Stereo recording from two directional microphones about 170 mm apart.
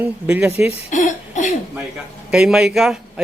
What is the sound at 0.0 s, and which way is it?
Speech, 10° right (ahead or behind).